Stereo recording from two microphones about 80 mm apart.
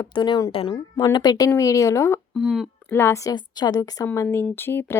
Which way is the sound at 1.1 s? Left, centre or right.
Left.